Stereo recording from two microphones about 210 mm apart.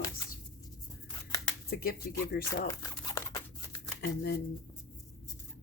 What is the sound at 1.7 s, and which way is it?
Speech, 45° left (ahead or behind).